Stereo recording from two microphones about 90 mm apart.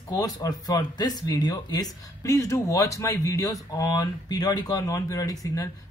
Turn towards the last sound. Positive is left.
turn(degrees=40)  # may be behind; listen again after turning